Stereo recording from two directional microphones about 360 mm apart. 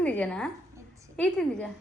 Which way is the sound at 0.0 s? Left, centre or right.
Centre.